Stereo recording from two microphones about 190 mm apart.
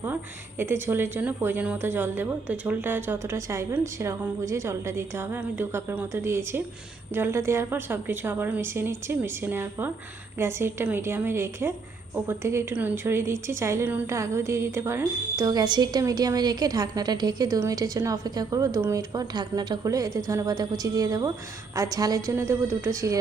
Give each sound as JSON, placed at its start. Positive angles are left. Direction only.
{"t": 0.6, "sound": "a woman's voice", "side_deg": -10}